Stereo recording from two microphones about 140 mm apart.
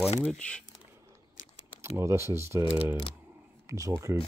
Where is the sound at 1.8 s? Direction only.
20° right (ahead or behind).